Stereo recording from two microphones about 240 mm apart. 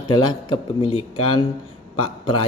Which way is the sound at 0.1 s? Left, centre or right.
Centre.